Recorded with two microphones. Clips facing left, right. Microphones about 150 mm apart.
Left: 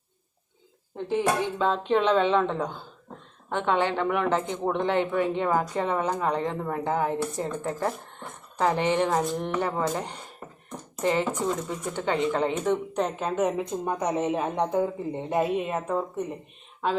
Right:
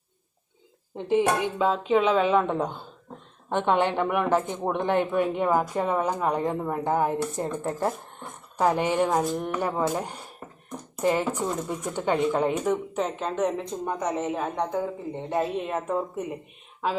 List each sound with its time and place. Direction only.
0.9 s speech: 20° right (ahead or behind)
1.5 s speech: 5° right (ahead or behind)